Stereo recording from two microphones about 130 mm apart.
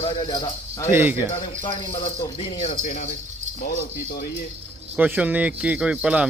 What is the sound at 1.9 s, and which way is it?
Speech, 50° left (ahead or behind).